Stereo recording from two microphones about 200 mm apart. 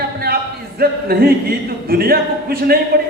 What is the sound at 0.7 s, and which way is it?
A man's voice, 50° right (ahead or behind).